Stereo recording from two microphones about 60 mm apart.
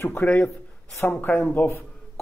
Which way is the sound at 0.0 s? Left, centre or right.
Left.